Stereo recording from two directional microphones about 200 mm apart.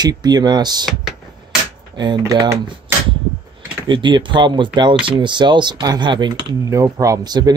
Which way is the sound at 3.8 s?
25° right (ahead or behind).